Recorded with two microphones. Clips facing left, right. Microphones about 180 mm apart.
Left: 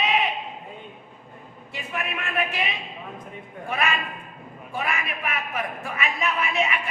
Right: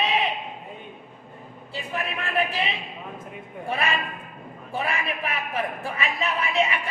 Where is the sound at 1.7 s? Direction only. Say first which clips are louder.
Right 1 dB; 35° right (ahead or behind).